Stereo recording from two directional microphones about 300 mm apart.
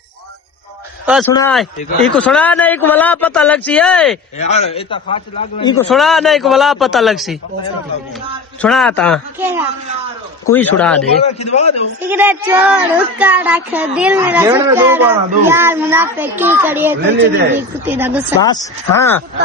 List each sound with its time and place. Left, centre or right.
1.3 s a man's voice: centre
4.4 s a man's voice: left
5.9 s speech: centre
8.6 s speech: centre
10.5 s speech: centre
11.2 s a man's voice: left
12.0 s speech: centre
17.0 s a man's voice: right
17.8 s speech: centre
18.9 s a man's voice: centre